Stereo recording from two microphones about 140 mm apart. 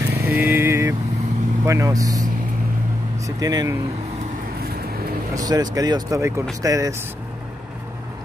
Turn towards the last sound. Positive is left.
turn(degrees=-25)  # may be behind; listen again after turning